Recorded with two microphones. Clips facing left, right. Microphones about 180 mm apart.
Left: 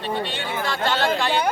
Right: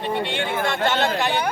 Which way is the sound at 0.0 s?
20° right (ahead or behind).